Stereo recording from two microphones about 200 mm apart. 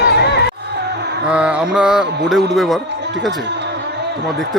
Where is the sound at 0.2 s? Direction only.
55° left (ahead or behind).